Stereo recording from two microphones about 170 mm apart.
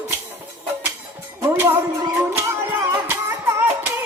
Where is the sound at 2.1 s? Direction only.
15° right (ahead or behind).